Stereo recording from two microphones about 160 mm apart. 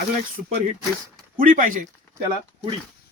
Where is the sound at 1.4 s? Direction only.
60° right (ahead or behind).